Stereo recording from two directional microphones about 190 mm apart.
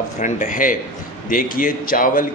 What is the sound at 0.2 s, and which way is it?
A man's voice, 40° left (ahead or behind).